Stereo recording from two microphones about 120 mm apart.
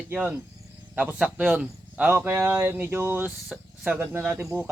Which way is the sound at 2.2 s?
20° right (ahead or behind).